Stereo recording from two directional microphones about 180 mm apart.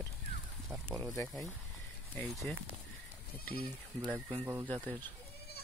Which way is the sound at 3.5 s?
30° right (ahead or behind).